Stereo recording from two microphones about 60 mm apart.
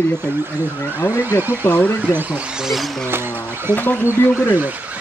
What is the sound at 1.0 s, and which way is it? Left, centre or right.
Speech, left.